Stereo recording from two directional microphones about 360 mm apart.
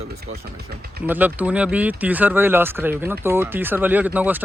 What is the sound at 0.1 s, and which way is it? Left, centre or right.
Speech, right.